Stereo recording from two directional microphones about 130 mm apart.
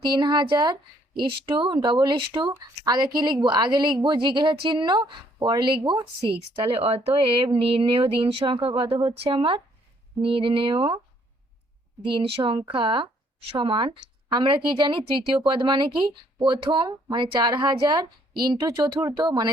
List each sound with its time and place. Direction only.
0.0 s speech: 35° right (ahead or behind)
6.7 s speech: 50° right (ahead or behind)
12.0 s speech: 40° right (ahead or behind)